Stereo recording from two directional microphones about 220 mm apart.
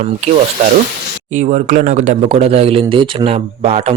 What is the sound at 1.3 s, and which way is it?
Speech, 35° right (ahead or behind).